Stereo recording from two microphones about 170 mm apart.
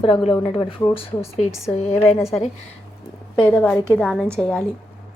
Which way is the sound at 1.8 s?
40° left (ahead or behind).